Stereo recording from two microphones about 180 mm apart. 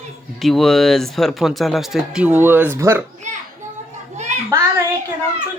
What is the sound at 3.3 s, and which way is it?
Children playing, 40° right (ahead or behind).